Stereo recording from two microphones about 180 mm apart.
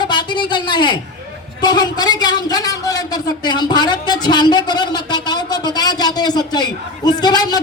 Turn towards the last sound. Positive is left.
turn(degrees=25)  # may be behind; listen again after turning